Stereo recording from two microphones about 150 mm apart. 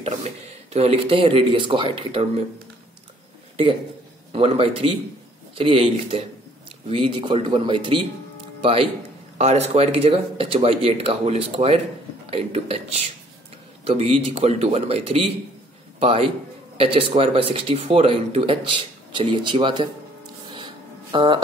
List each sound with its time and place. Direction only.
0.0 s speech: 45° right (ahead or behind)
4.3 s speech: 40° right (ahead or behind)
9.4 s speech: 45° right (ahead or behind)
20.5 s a sound: 30° right (ahead or behind)